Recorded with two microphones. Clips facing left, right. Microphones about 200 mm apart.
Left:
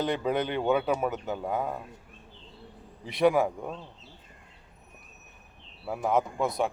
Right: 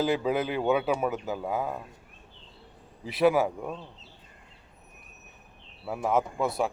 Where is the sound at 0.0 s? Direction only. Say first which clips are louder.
Right 2 dB; 5° right (ahead or behind).